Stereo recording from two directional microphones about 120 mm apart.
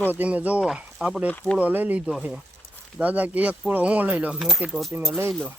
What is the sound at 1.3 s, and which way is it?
Speech, 15° left (ahead or behind).